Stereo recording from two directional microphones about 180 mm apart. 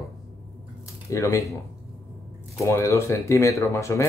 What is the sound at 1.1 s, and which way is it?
Speech, 15° left (ahead or behind).